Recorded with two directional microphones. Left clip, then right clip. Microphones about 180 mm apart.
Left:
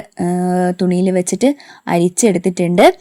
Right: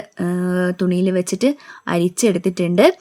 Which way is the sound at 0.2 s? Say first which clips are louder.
Left 4 dB; 15° left (ahead or behind).